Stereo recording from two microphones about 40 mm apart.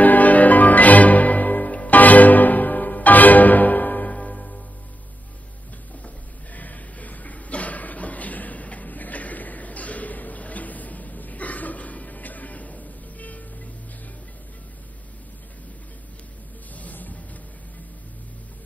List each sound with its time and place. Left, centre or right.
0.0 s music: left
6.0 s a sound: left
16.7 s music: left